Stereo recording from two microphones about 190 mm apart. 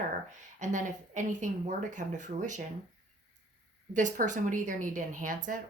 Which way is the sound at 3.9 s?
40° right (ahead or behind).